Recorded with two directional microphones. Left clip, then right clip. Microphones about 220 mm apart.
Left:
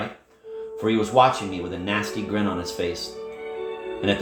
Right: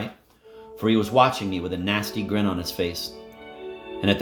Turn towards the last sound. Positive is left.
turn(degrees=-50)  # may be behind; listen again after turning